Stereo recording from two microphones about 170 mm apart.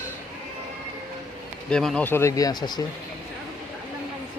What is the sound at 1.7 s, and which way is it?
Speech, 5° left (ahead or behind).